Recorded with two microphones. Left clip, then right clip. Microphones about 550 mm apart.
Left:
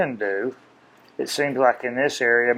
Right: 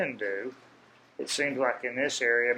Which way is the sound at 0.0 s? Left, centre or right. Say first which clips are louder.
Left 8 dB; left.